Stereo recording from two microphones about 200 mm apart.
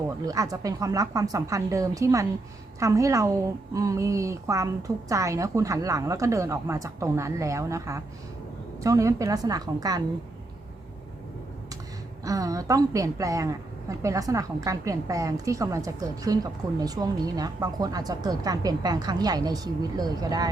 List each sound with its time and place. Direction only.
0.3 s a woman's voice: 15° right (ahead or behind)
12.2 s a woman's voice: 15° right (ahead or behind)